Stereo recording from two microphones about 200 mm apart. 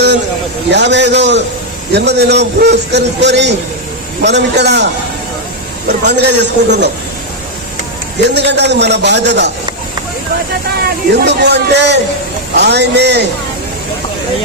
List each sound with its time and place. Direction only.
0.7 s a man's voice: 60° right (ahead or behind)
6.1 s a man's voice: 60° right (ahead or behind)
8.3 s a man's voice: 60° right (ahead or behind)
10.8 s a man's voice: 60° right (ahead or behind)